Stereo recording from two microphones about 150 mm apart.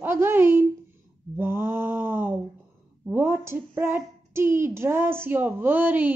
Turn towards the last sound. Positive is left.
turn(degrees=-10)  # may be behind; listen again after turning